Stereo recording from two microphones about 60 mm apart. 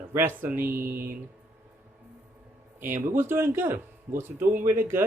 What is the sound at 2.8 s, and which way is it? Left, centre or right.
Speech, right.